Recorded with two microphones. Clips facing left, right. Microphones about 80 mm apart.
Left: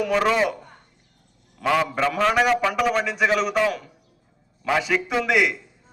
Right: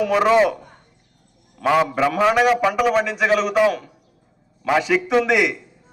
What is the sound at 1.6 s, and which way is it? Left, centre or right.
A man's voice, centre.